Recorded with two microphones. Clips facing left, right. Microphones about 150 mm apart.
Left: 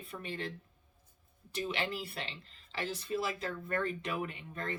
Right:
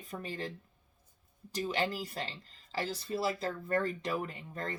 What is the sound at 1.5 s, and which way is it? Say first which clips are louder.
Speech: right 3 dB; 40° right (ahead or behind).